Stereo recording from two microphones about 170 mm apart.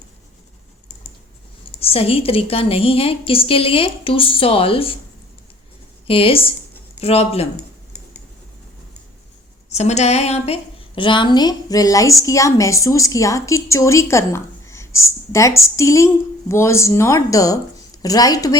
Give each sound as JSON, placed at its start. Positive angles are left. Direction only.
{"t": 1.8, "sound": "a woman's voice", "side_deg": 35}
{"t": 6.1, "sound": "a woman's voice", "side_deg": 35}
{"t": 9.6, "sound": "a woman's voice", "side_deg": 40}